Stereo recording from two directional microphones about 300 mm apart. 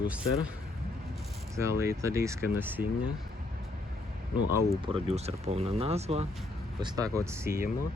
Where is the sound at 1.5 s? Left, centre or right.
Centre.